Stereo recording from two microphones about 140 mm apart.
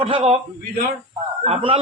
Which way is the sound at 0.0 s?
40° right (ahead or behind).